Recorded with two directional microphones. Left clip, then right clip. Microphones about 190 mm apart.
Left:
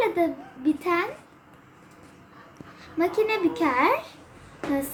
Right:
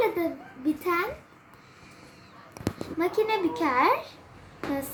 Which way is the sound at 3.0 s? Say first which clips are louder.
Left 2 dB; 10° right (ahead or behind).